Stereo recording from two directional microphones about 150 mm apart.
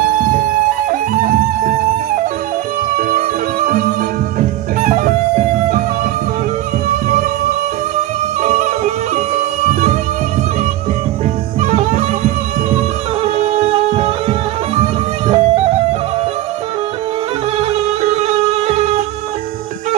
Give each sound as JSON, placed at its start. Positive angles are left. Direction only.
{"t": 0.8, "sound": "music", "side_deg": -70}
{"t": 3.0, "sound": "music", "side_deg": -70}
{"t": 8.4, "sound": "bagpipes", "side_deg": -55}
{"t": 11.6, "sound": "music", "side_deg": -55}
{"t": 13.2, "sound": "music", "side_deg": -40}
{"t": 18.2, "sound": "music", "side_deg": -45}